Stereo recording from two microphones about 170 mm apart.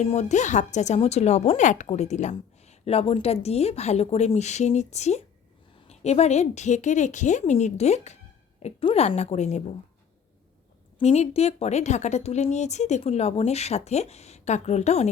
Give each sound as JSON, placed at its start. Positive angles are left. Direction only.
{"t": 0.0, "sound": "a woman's voice", "side_deg": 40}
{"t": 11.0, "sound": "a woman's voice", "side_deg": 40}